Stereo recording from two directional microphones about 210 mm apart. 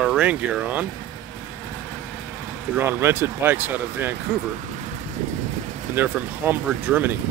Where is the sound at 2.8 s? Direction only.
10° right (ahead or behind).